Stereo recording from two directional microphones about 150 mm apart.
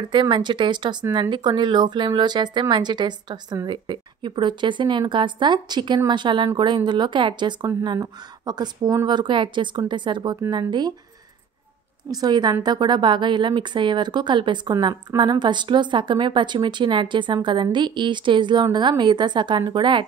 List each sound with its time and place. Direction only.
0.1 s a woman's voice: 30° right (ahead or behind)
12.1 s a woman's voice: 25° right (ahead or behind)